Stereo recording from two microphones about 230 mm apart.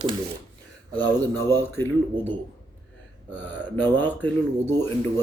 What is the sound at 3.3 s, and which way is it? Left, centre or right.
Speech, centre.